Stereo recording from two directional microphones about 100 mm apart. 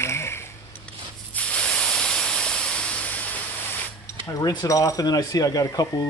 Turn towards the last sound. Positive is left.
turn(degrees=35)  # may be behind; listen again after turning